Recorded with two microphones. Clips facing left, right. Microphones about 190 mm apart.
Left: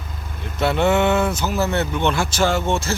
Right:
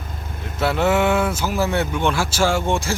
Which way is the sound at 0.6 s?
5° right (ahead or behind).